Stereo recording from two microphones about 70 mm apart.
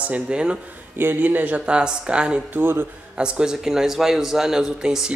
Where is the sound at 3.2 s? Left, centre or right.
Centre.